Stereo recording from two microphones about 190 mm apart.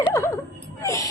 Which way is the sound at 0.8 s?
15° left (ahead or behind).